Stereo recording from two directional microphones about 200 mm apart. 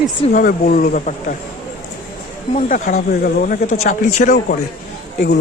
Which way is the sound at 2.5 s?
35° left (ahead or behind).